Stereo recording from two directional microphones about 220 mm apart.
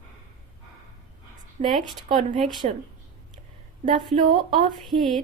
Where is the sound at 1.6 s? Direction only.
30° right (ahead or behind).